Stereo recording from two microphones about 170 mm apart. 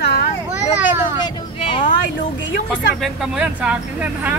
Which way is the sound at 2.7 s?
Centre (ahead or behind).